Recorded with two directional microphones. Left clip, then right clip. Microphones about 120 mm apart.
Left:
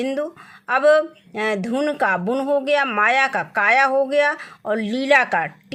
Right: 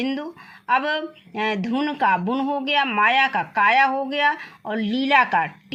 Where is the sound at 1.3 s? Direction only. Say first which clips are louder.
Right 3 dB; 50° left (ahead or behind).